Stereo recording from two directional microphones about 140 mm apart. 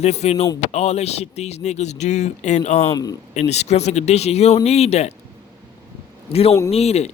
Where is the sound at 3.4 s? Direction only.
50° left (ahead or behind).